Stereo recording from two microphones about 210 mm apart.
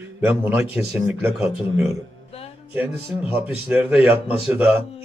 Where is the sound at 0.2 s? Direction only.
5° right (ahead or behind).